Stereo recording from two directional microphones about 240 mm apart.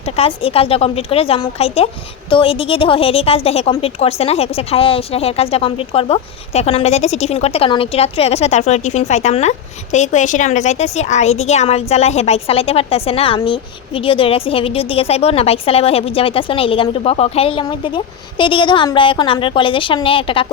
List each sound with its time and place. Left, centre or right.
0.0 s a woman's voice: left